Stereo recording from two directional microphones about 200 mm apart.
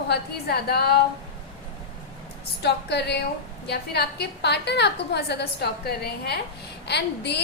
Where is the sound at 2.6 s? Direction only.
55° left (ahead or behind).